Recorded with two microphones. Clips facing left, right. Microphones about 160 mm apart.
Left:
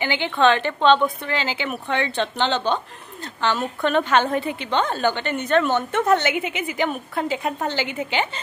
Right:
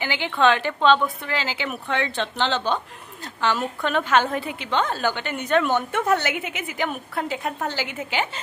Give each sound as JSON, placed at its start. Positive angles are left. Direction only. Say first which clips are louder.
{"t": 0.0, "sound": "a woman's voice", "louder": "left 2 dB", "side_deg": -5}